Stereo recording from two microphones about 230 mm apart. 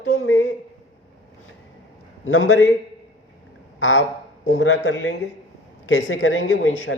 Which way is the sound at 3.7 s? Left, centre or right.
Left.